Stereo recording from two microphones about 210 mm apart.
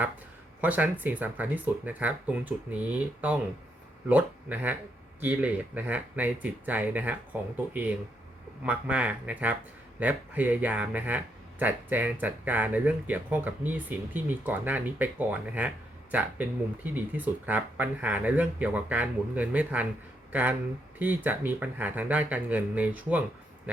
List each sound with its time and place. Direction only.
0.6 s speech: 5° right (ahead or behind)